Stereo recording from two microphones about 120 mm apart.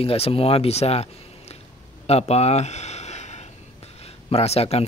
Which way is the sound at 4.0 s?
60° left (ahead or behind).